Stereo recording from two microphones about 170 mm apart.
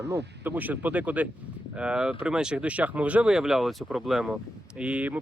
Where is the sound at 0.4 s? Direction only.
10° right (ahead or behind).